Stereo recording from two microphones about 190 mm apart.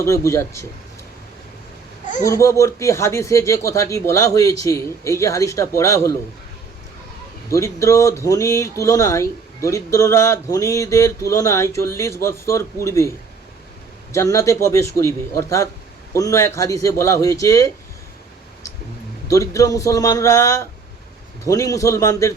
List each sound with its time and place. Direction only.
0.0 s speech: 15° left (ahead or behind)
2.2 s speech: 15° left (ahead or behind)
7.5 s speech: 15° left (ahead or behind)
14.1 s speech: 15° left (ahead or behind)
19.3 s speech: 15° left (ahead or behind)